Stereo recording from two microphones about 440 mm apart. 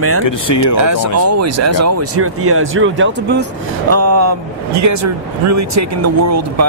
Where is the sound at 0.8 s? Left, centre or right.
Right.